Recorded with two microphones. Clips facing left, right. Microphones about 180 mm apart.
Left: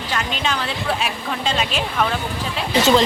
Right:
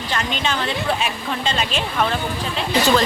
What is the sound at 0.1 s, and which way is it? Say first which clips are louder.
Speech: even; 5° left (ahead or behind).